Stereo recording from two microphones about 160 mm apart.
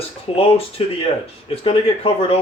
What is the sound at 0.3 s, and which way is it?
Speech, 35° left (ahead or behind).